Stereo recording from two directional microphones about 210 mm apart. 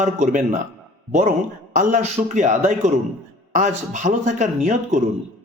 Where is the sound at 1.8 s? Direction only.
35° right (ahead or behind).